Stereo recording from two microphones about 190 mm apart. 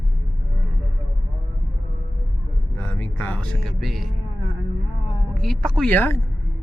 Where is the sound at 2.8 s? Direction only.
10° left (ahead or behind).